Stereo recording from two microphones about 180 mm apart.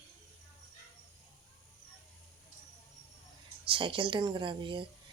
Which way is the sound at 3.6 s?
30° right (ahead or behind).